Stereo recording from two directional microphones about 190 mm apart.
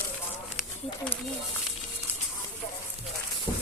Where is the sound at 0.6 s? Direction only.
5° left (ahead or behind).